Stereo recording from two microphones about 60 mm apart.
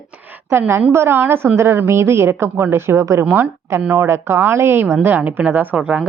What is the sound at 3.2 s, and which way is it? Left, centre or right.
Speech, right.